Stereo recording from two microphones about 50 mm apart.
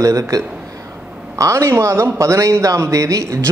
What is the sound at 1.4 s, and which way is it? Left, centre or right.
Speech, right.